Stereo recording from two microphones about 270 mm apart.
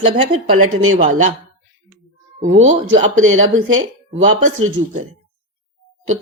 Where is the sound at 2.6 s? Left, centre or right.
Right.